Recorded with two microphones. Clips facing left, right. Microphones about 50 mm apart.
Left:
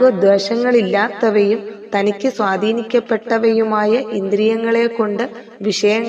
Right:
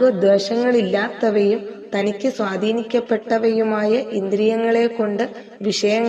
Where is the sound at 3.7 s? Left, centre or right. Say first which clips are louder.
Left 3 dB; left.